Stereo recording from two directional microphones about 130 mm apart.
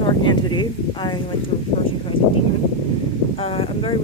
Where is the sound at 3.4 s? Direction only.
45° left (ahead or behind).